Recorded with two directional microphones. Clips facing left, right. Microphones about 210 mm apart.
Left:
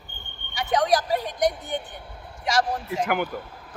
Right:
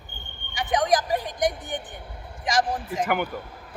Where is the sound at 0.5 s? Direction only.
15° right (ahead or behind).